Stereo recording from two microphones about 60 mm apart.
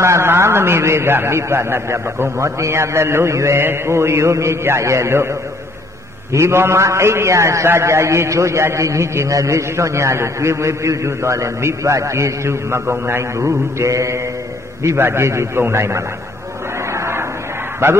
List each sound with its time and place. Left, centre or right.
0.0 s a man's voice: right
6.3 s a man's voice: right
16.9 s a sound: right
17.8 s a man's voice: right